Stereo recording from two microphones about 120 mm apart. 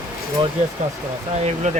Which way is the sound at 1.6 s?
90° right.